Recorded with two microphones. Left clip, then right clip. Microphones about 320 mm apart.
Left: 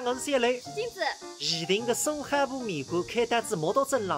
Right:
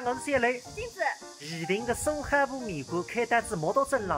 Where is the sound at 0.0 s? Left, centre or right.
Centre.